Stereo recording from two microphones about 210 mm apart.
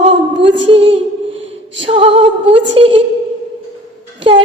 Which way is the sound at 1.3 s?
65° right (ahead or behind).